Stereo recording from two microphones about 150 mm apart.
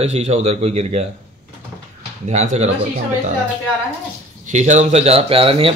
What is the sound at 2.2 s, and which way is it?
Speech, 50° right (ahead or behind).